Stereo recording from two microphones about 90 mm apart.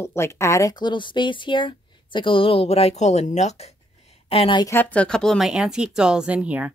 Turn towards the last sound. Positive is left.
turn(degrees=-15)  # may be behind; listen again after turning